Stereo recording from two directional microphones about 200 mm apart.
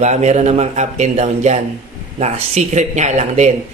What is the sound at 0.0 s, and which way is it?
A man's voice, 35° right (ahead or behind).